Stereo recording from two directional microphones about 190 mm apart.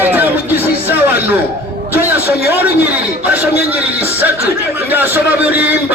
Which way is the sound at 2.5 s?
10° right (ahead or behind).